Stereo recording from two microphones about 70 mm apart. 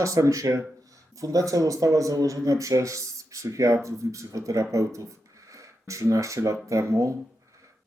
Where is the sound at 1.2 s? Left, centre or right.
Right.